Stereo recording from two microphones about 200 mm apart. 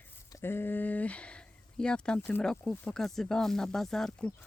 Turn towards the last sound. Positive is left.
turn(degrees=5)  # may be behind; listen again after turning